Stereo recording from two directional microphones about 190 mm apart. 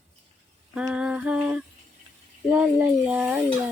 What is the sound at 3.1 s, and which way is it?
Speech, 5° right (ahead or behind).